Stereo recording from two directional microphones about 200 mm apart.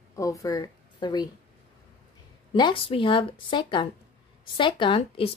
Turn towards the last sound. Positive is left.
turn(degrees=25)  # may be behind; listen again after turning